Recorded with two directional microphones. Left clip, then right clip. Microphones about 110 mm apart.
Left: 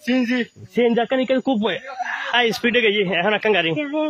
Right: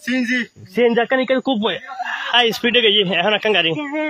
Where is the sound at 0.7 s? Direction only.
20° left (ahead or behind).